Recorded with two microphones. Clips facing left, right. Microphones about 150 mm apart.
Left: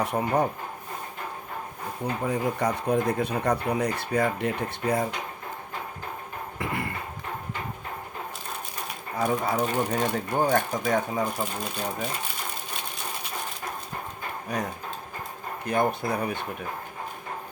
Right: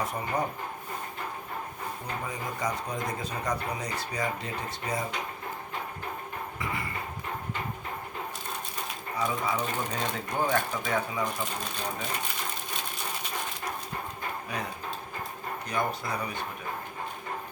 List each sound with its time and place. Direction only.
0.0 s speech: 65° left (ahead or behind)
2.2 s speech: 60° left (ahead or behind)
6.6 s speech: 55° left (ahead or behind)
9.1 s speech: 50° left (ahead or behind)
14.4 s speech: 45° left (ahead or behind)